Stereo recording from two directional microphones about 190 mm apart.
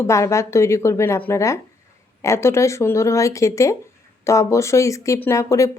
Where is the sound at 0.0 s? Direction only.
15° left (ahead or behind).